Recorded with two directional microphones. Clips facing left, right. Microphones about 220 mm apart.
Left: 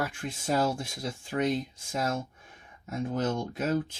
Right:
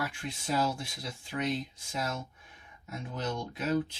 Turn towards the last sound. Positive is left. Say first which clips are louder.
# left 2 dB
turn(degrees=45)  # may be behind; listen again after turning